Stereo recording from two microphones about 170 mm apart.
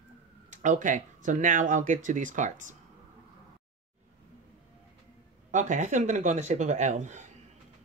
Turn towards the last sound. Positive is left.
turn(degrees=-45)  # may be behind; listen again after turning